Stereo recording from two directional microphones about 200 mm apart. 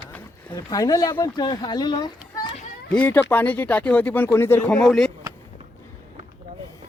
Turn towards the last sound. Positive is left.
turn(degrees=5)  # may be behind; listen again after turning